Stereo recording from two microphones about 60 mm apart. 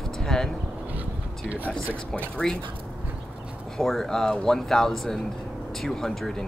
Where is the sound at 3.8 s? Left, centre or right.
Centre.